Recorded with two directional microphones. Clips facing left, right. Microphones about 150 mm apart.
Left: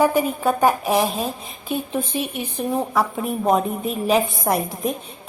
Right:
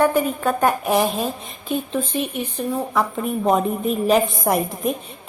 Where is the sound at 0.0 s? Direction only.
5° left (ahead or behind).